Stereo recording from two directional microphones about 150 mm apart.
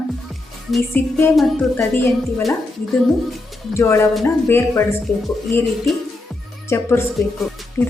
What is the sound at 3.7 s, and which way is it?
A woman's voice, 20° left (ahead or behind).